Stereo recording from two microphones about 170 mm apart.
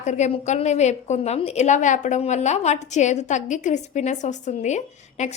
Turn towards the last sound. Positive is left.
turn(degrees=40)  # may be behind; listen again after turning